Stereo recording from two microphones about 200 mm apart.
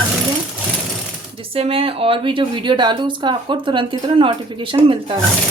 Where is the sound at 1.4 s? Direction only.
30° right (ahead or behind).